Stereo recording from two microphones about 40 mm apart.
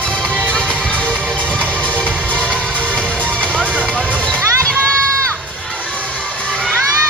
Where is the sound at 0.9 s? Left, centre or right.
Left.